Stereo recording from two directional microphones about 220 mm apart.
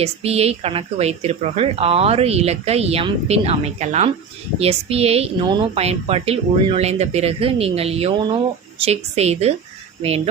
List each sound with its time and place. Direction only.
0.0 s speech: 30° right (ahead or behind)